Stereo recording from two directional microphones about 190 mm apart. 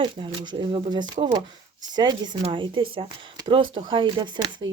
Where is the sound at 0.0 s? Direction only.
25° right (ahead or behind).